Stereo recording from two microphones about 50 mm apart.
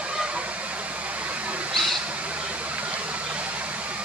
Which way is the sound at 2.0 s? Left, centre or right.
Right.